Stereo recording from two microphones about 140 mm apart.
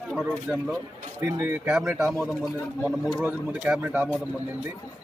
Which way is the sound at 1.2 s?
20° right (ahead or behind).